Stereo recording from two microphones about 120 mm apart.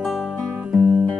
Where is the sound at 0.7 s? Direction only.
10° right (ahead or behind).